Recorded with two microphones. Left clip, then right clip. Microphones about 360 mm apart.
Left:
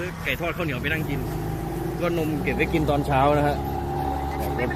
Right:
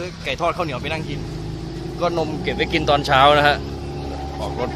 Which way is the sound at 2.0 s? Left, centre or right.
Centre.